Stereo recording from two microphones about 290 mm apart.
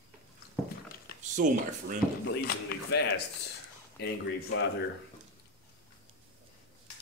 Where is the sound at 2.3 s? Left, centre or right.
Left.